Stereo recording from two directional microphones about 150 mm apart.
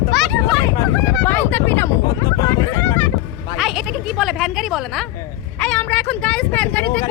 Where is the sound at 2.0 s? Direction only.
25° left (ahead or behind).